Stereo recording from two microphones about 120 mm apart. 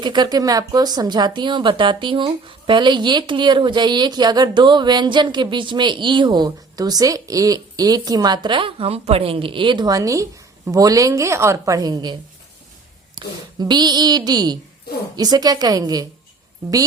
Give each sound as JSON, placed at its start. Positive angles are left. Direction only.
{"t": 0.0, "sound": "a woman's voice", "side_deg": -35}
{"t": 13.1, "sound": "speech", "side_deg": -35}